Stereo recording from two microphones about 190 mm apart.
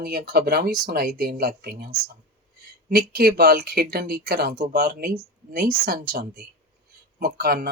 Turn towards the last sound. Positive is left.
turn(degrees=-55)  # may be behind; listen again after turning